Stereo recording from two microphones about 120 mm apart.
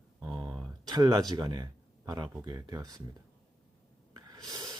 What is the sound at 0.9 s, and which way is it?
Speech, 35° right (ahead or behind).